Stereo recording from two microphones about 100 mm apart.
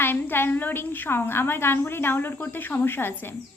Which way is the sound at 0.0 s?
20° left (ahead or behind).